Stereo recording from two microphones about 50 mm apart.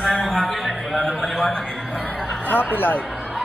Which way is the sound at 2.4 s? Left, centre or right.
Left.